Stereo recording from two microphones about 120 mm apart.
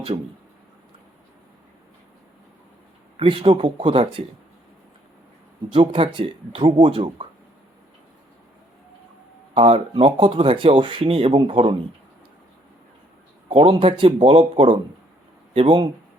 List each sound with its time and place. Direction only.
3.2 s speech: 50° right (ahead or behind)
5.7 s speech: 50° right (ahead or behind)
9.6 s speech: 50° right (ahead or behind)
13.5 s speech: 50° right (ahead or behind)